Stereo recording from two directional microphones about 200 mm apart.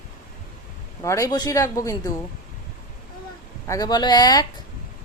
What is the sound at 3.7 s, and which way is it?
Speech, 20° left (ahead or behind).